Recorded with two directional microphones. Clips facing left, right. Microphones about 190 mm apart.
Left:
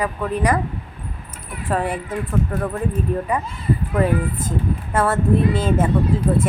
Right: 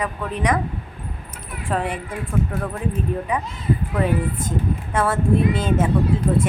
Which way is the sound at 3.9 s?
Centre (ahead or behind).